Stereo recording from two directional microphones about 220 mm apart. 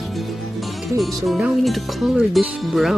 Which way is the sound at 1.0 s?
Centre (ahead or behind).